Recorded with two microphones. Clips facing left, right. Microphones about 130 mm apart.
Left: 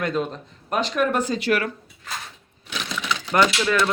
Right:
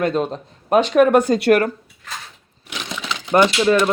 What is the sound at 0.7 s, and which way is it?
Speech, 60° right (ahead or behind).